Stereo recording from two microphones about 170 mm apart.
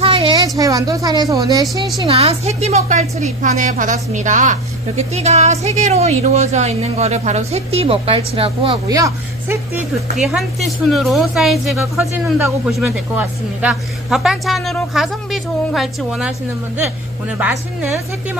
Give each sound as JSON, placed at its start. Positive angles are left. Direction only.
{"t": 0.0, "sound": "a sound", "side_deg": -35}
{"t": 0.6, "sound": "speech", "side_deg": -20}
{"t": 2.0, "sound": "a woman's voice", "side_deg": -35}
{"t": 8.9, "sound": "speech", "side_deg": -20}
{"t": 10.1, "sound": "a woman's voice", "side_deg": 0}